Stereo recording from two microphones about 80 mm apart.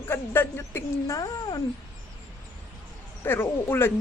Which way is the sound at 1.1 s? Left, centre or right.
Left.